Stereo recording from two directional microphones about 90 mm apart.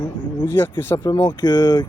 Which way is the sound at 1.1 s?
50° left (ahead or behind).